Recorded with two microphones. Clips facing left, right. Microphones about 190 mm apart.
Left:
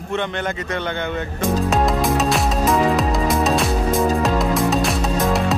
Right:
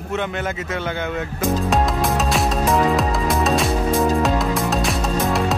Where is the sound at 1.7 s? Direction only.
Centre (ahead or behind).